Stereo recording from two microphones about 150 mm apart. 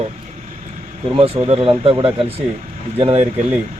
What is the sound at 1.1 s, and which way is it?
A man's voice, 40° right (ahead or behind).